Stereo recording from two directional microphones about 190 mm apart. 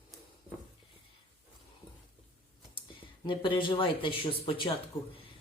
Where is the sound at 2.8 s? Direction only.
25° left (ahead or behind).